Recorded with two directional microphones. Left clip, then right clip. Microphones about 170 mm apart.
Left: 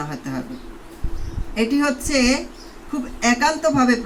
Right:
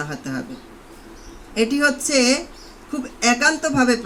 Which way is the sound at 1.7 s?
40° right (ahead or behind).